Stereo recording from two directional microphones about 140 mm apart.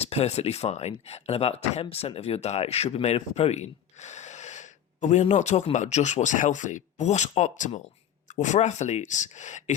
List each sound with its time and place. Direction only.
0.0 s speech: 45° left (ahead or behind)